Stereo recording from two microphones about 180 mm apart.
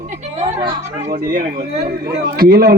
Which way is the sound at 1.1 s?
55° right (ahead or behind).